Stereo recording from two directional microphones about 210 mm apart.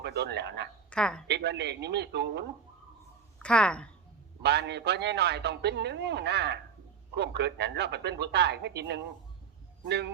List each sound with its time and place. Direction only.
0.0 s speech: 55° right (ahead or behind)
0.9 s a woman's voice: 5° left (ahead or behind)
1.3 s a man's voice: 55° right (ahead or behind)
3.3 s speech: 5° left (ahead or behind)
4.4 s a man's voice: 50° right (ahead or behind)